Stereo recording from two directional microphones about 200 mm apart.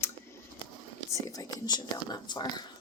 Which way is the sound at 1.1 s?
15° left (ahead or behind).